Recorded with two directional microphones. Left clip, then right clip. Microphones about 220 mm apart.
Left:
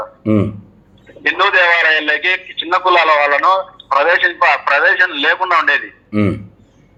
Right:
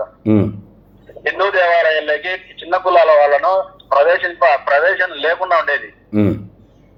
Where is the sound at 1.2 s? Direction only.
25° left (ahead or behind).